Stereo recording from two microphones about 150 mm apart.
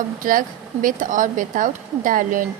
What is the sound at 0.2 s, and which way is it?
A woman's voice, 65° right (ahead or behind).